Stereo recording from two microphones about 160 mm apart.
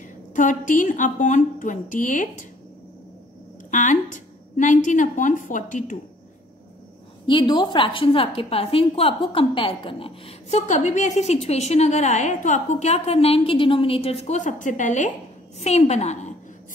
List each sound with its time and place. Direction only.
0.0 s speech: 55° left (ahead or behind)
3.7 s speech: 50° left (ahead or behind)
7.2 s a woman's voice: 30° left (ahead or behind)